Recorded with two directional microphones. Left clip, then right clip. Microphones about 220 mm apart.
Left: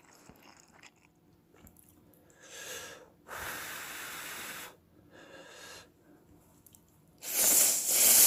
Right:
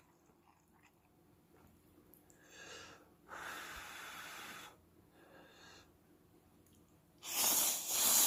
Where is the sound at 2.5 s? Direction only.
50° left (ahead or behind).